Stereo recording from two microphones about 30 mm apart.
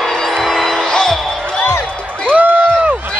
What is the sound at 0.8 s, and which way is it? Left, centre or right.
Music, centre.